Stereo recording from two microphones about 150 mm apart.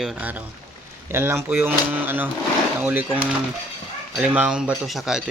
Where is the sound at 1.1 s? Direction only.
15° right (ahead or behind).